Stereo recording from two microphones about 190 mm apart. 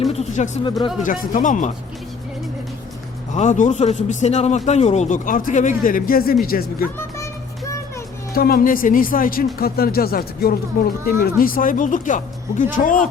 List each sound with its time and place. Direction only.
0.1 s speech: 35° left (ahead or behind)
0.6 s speech: 25° left (ahead or behind)
1.0 s speech: 45° left (ahead or behind)
3.3 s speech: 40° left (ahead or behind)
8.3 s speech: 50° left (ahead or behind)